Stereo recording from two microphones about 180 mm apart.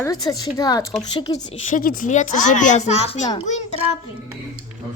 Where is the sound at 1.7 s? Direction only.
50° left (ahead or behind).